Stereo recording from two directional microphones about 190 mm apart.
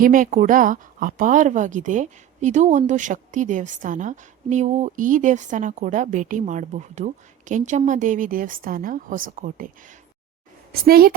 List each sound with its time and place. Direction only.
0.0 s a woman's voice: 45° right (ahead or behind)